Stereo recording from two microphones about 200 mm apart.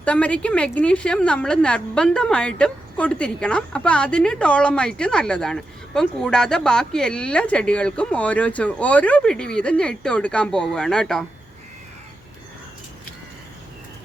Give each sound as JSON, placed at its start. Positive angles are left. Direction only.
{"t": 0.0, "sound": "a woman's voice", "side_deg": 5}